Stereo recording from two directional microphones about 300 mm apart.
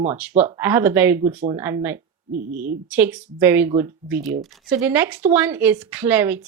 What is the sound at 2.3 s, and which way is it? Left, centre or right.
Speech, right.